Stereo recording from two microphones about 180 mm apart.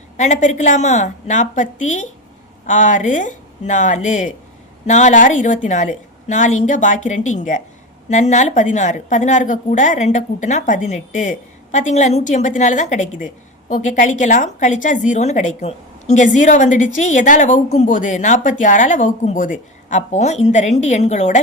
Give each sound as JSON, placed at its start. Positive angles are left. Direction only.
{"t": 0.2, "sound": "a woman's voice", "side_deg": 40}